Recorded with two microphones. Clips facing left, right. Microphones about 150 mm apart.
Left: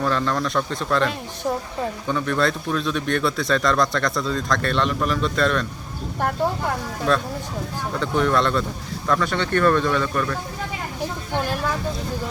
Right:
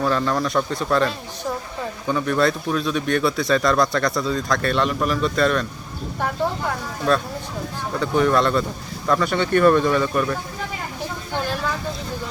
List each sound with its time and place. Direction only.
0.0 s a man's voice: 5° right (ahead or behind)
7.1 s a man's voice: 5° right (ahead or behind)